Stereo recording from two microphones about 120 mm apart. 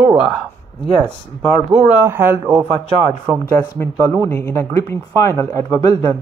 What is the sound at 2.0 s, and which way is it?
Speech, 20° right (ahead or behind).